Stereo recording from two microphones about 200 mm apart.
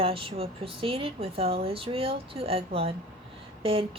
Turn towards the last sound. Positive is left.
turn(degrees=-30)  # may be behind; listen again after turning